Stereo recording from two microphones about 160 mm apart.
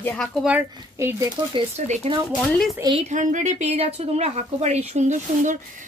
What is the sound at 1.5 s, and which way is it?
Speech, 40° right (ahead or behind).